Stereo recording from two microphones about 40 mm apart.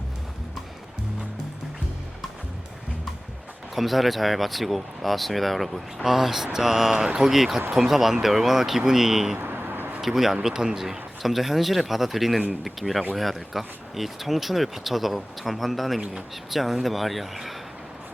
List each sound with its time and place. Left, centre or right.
3.8 s speech: centre
9.4 s vehicle: right
10.0 s speech: centre